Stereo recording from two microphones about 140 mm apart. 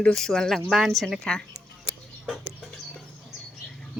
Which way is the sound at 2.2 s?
5° right (ahead or behind).